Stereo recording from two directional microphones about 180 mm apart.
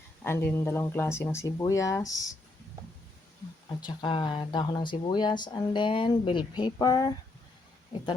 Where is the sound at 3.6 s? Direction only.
25° left (ahead or behind).